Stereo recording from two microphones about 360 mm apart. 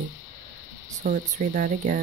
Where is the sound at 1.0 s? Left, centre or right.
Right.